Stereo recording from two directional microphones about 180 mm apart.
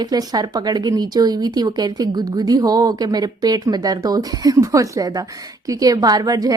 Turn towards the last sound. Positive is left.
turn(degrees=-20)  # may be behind; listen again after turning